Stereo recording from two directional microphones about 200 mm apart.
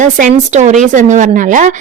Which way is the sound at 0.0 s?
40° right (ahead or behind).